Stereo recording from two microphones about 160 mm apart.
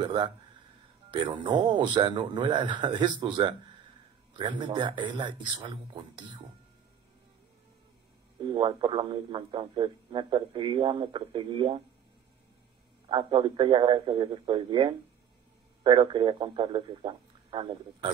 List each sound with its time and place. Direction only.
0.0 s a man's voice: 30° right (ahead or behind)
8.4 s speech: 30° right (ahead or behind)
13.1 s speech: 30° right (ahead or behind)